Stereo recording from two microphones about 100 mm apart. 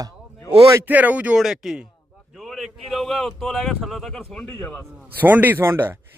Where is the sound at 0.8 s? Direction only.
15° right (ahead or behind).